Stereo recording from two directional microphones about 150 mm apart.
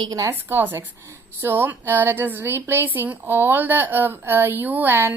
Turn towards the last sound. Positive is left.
turn(degrees=-15)  # may be behind; listen again after turning